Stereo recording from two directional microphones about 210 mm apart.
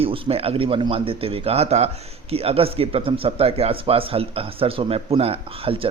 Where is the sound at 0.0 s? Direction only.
30° right (ahead or behind).